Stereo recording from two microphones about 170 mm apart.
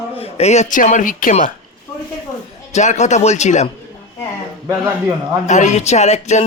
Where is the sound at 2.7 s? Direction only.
45° left (ahead or behind).